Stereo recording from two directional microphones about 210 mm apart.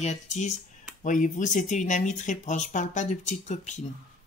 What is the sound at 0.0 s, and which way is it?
Speech, 35° left (ahead or behind).